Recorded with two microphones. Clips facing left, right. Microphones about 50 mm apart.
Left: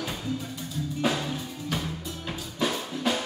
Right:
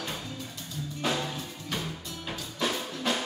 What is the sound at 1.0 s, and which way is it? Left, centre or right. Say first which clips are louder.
Music: left 2 dB; centre.